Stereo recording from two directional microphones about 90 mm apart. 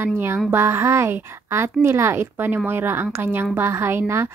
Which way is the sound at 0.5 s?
30° right (ahead or behind).